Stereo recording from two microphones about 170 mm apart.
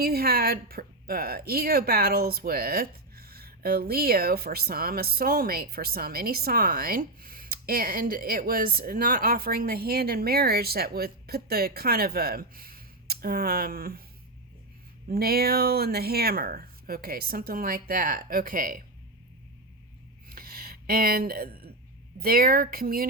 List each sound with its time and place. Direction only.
0.0 s speech: 65° right (ahead or behind)
15.1 s speech: 65° right (ahead or behind)
20.2 s a sound: 60° right (ahead or behind)
22.2 s speech: 60° right (ahead or behind)